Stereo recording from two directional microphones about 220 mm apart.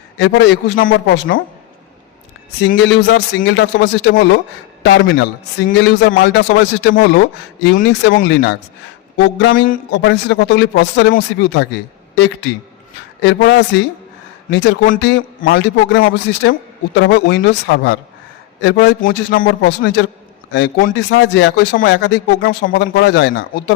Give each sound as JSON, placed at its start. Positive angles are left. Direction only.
{"t": 0.2, "sound": "a man's voice", "side_deg": 55}
{"t": 2.6, "sound": "a man's voice", "side_deg": 55}
{"t": 13.2, "sound": "a man's voice", "side_deg": 55}
{"t": 22.4, "sound": "a man's voice", "side_deg": 45}